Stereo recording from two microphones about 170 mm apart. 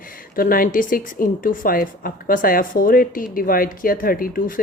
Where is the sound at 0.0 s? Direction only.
55° left (ahead or behind).